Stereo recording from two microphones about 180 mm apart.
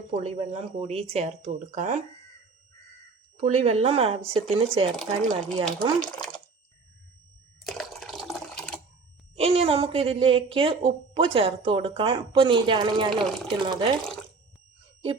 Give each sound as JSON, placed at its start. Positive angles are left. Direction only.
{"t": 0.1, "sound": "speech", "side_deg": -35}
{"t": 3.4, "sound": "speech", "side_deg": -40}
{"t": 4.9, "sound": "speech", "side_deg": 5}
{"t": 7.6, "sound": "a sound", "side_deg": 0}
{"t": 9.3, "sound": "speech", "side_deg": -35}